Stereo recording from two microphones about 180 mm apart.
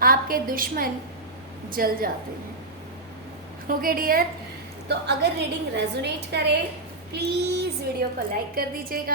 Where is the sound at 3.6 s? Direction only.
55° right (ahead or behind).